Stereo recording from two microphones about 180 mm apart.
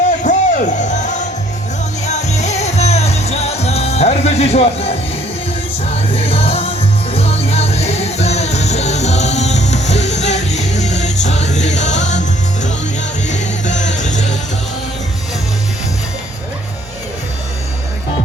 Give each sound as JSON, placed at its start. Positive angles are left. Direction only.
{"t": 0.2, "sound": "music", "side_deg": 45}
{"t": 13.2, "sound": "music", "side_deg": 40}